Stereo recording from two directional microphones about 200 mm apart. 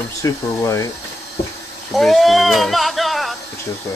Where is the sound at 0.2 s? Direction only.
15° left (ahead or behind).